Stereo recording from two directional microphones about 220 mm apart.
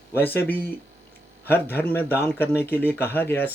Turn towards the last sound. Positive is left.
turn(degrees=10)  # may be behind; listen again after turning